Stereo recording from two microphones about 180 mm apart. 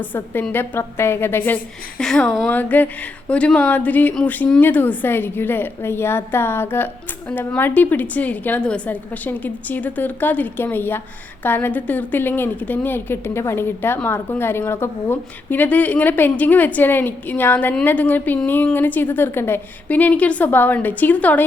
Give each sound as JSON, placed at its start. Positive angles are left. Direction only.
{"t": 0.0, "sound": "a woman's voice", "side_deg": 10}